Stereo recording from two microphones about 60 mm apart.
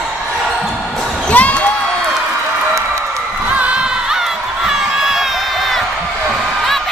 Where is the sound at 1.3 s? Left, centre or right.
Left.